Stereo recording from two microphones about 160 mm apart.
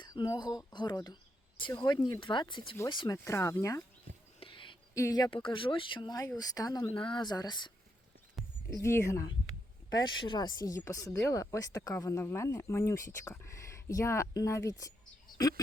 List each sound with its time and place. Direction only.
0.0 s speech: 25° left (ahead or behind)
4.4 s a sound: 35° left (ahead or behind)
4.9 s speech: 20° left (ahead or behind)
8.8 s speech: 15° left (ahead or behind)
10.2 s speech: 30° left (ahead or behind)